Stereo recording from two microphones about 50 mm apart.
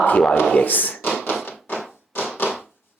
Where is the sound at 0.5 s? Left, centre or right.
Left.